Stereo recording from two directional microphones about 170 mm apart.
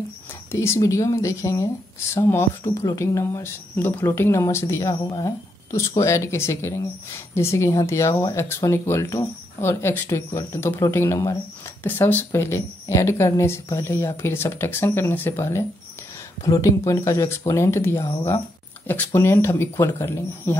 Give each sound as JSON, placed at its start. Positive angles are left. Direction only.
{"t": 0.5, "sound": "speech", "side_deg": 15}